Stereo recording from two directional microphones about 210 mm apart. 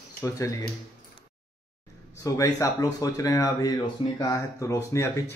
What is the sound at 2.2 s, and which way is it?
Speech, 15° left (ahead or behind).